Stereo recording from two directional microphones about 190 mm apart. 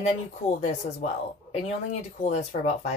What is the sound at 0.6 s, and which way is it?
Speech, 35° left (ahead or behind).